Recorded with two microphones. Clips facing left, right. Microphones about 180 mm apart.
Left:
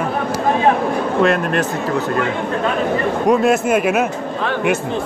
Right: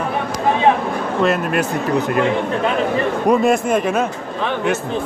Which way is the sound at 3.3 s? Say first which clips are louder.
Left 1 dB; centre (ahead or behind).